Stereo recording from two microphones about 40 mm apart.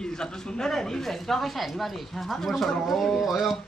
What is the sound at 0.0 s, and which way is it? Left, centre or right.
A man's voice, centre.